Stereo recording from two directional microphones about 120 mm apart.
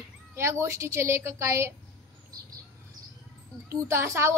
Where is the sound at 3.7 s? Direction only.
20° right (ahead or behind).